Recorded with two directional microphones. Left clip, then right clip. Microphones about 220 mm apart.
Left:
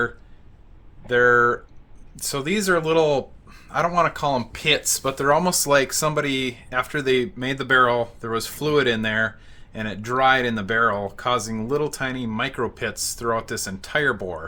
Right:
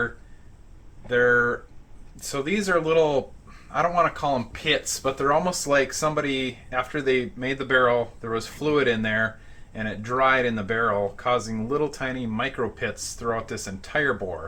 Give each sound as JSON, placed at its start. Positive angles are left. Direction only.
{"t": 1.0, "sound": "speech", "side_deg": 50}